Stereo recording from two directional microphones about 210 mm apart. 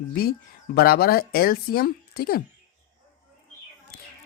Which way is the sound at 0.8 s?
45° left (ahead or behind).